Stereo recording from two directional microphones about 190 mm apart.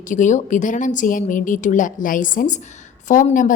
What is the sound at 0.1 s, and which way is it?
A woman's voice, 40° left (ahead or behind).